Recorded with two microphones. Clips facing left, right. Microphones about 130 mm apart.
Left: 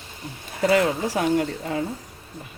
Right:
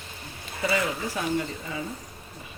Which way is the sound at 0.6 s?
80° left.